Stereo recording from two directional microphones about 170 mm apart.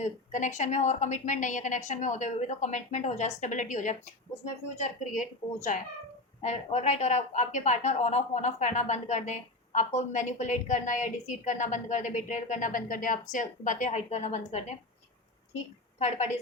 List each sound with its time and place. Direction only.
0.0 s a woman's voice: 45° left (ahead or behind)
6.4 s a woman's voice: 40° left (ahead or behind)